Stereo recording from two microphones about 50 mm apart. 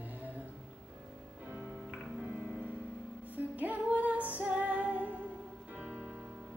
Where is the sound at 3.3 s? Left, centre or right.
Right.